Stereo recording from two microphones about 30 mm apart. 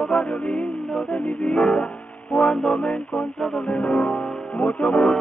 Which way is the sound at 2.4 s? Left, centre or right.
Left.